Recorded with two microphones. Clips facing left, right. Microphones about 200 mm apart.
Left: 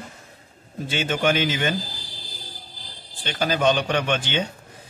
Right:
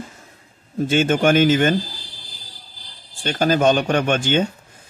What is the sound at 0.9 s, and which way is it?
Speech, 50° right (ahead or behind).